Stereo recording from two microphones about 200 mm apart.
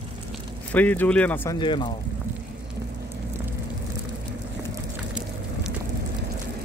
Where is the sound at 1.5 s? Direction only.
25° left (ahead or behind).